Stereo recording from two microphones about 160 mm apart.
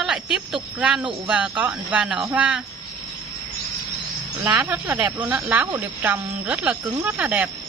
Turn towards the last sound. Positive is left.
turn(degrees=-10)  # may be behind; listen again after turning